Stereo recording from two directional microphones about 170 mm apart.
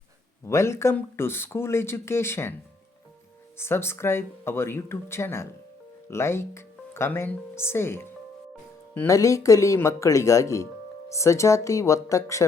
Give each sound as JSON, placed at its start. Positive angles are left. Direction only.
{"t": 0.4, "sound": "speech", "side_deg": 15}
{"t": 3.6, "sound": "speech", "side_deg": 15}